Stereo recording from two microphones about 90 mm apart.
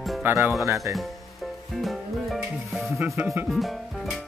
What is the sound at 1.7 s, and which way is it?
Music, centre (ahead or behind).